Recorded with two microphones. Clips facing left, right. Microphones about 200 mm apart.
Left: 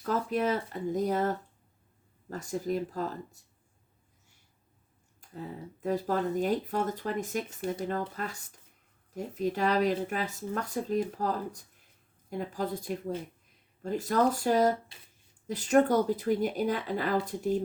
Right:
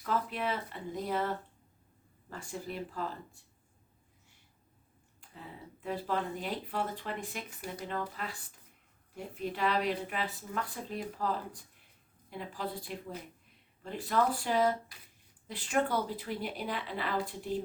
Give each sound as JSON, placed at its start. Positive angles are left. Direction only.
{"t": 0.0, "sound": "speech", "side_deg": 40}
{"t": 2.3, "sound": "speech", "side_deg": 40}
{"t": 5.8, "sound": "speech", "side_deg": 40}
{"t": 7.6, "sound": "speech", "side_deg": 25}
{"t": 8.1, "sound": "speech", "side_deg": 45}